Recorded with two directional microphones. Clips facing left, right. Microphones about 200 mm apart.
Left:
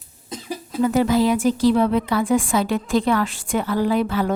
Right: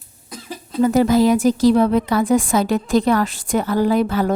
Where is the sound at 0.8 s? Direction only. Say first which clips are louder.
Right 3 dB; 40° right (ahead or behind).